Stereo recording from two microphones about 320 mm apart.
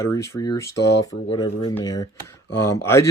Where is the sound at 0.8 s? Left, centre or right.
Left.